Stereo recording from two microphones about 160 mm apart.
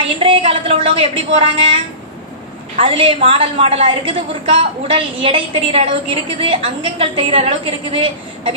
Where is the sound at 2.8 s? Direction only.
35° right (ahead or behind).